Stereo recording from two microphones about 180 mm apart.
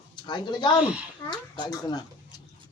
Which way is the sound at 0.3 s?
25° left (ahead or behind).